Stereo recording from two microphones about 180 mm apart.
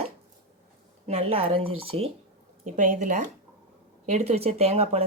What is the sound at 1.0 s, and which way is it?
Speech, 35° right (ahead or behind).